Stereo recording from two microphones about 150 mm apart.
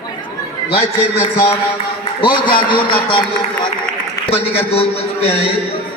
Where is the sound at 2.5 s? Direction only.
35° left (ahead or behind).